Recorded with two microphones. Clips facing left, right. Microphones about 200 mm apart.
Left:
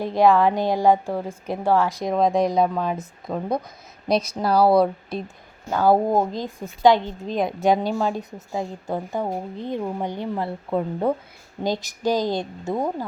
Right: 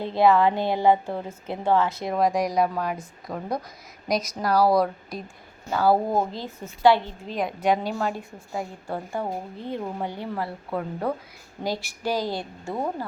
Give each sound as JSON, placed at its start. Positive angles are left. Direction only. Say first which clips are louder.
{"t": 0.0, "sound": "a woman's voice", "louder": "left 2 dB", "side_deg": 15}
{"t": 8.5, "sound": "a woman's voice", "louder": "left 4 dB", "side_deg": 20}